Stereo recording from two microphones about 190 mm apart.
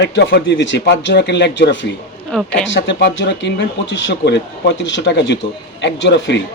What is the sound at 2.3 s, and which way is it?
Speech, 5° left (ahead or behind).